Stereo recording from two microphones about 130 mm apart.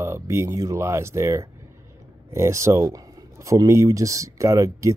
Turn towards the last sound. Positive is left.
turn(degrees=-25)  # may be behind; listen again after turning